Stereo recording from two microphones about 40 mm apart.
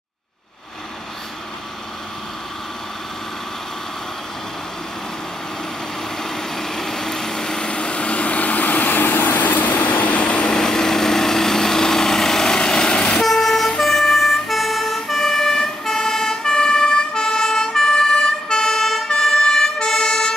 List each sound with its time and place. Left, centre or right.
6.2 s vehicle: centre; by 9.9 s left
10.0 s vehicle: left
10.6 s light engine: centre
13.2 s vehicle: centre
19.1 s emergency vehicle: centre